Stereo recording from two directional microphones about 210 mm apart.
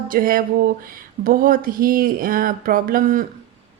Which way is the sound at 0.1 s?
40° right (ahead or behind).